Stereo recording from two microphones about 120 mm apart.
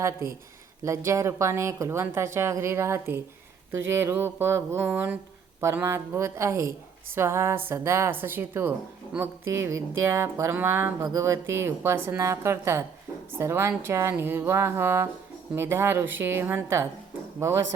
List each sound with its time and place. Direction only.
0.9 s a woman's voice: 25° right (ahead or behind)